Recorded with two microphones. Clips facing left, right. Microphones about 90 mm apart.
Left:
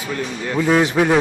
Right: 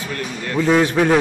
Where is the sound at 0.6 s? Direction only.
15° left (ahead or behind).